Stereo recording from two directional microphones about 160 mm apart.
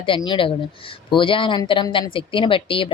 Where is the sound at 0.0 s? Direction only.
30° left (ahead or behind).